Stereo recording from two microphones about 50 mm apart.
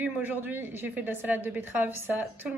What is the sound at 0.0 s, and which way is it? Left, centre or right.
A woman's voice, right.